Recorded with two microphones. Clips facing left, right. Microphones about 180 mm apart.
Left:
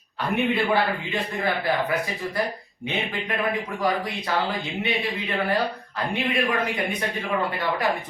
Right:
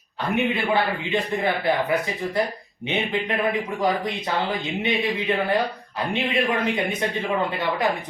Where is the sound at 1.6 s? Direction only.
20° right (ahead or behind).